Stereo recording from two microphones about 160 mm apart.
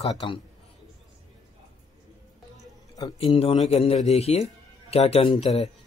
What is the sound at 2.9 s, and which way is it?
A man's voice, 30° left (ahead or behind).